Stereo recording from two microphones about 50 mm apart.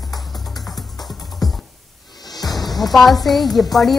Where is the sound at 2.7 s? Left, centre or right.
Centre.